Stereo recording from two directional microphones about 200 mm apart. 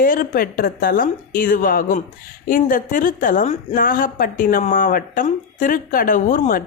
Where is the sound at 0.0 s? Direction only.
45° left (ahead or behind).